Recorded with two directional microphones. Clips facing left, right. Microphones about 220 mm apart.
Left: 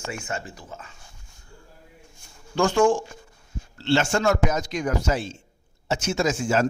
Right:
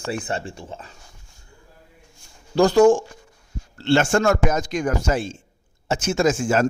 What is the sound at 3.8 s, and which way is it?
Speech, 50° right (ahead or behind).